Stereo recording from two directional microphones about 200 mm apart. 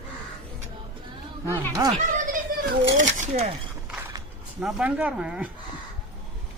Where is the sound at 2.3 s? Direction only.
40° right (ahead or behind).